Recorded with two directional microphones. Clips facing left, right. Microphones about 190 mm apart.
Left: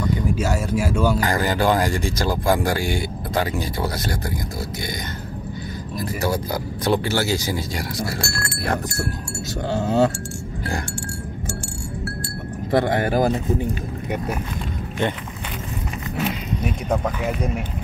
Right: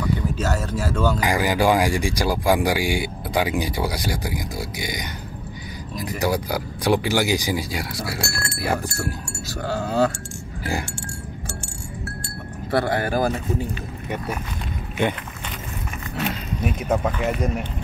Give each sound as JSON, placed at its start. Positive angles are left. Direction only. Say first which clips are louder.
{"t": 0.4, "sound": "speech", "louder": "left 3 dB", "side_deg": 10}
{"t": 1.2, "sound": "speech", "louder": "right 1 dB", "side_deg": -10}
{"t": 9.7, "sound": "speech", "louder": "left 2 dB", "side_deg": 20}
{"t": 12.7, "sound": "speech", "louder": "left 2 dB", "side_deg": 20}
{"t": 16.2, "sound": "speech", "louder": "left 1 dB", "side_deg": 0}